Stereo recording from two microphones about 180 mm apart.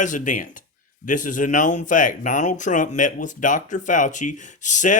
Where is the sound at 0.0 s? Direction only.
45° left (ahead or behind).